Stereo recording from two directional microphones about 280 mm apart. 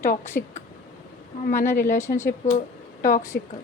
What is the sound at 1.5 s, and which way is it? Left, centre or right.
A woman's voice, centre.